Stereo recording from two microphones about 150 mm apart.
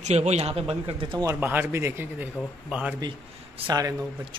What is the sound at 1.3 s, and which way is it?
Speech, 10° right (ahead or behind).